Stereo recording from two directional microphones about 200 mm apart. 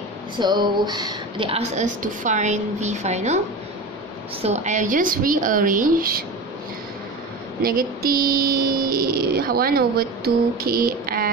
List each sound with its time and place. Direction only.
0.4 s a sound: 20° right (ahead or behind)
1.8 s a woman's voice: 35° right (ahead or behind)
4.4 s a woman's voice: 35° right (ahead or behind)
7.6 s speech: 45° right (ahead or behind)